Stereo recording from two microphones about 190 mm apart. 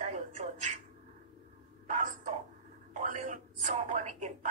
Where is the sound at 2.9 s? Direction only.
40° right (ahead or behind).